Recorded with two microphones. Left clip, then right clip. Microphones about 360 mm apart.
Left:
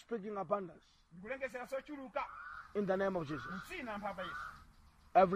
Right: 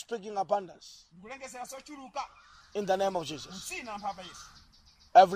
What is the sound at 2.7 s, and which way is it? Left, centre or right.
Speech, right.